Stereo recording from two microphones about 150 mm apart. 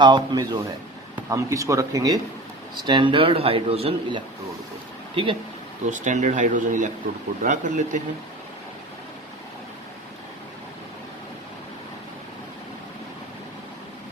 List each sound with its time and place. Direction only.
0.0 s speech: 25° right (ahead or behind)
5.9 s speech: 55° right (ahead or behind)